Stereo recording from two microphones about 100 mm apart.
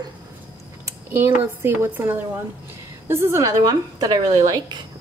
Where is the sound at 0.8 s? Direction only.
25° right (ahead or behind).